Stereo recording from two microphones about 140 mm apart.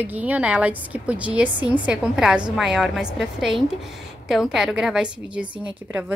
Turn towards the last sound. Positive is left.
turn(degrees=-10)  # may be behind; listen again after turning